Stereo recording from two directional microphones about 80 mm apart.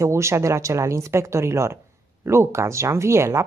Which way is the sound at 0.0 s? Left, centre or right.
Right.